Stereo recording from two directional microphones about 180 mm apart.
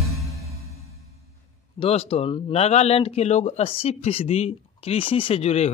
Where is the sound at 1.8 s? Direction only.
35° left (ahead or behind).